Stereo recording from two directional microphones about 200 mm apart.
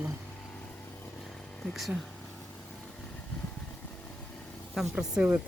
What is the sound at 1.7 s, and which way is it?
Speech, centre (ahead or behind).